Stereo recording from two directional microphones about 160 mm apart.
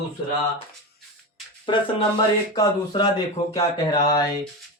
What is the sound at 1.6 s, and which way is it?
Speech, 30° left (ahead or behind).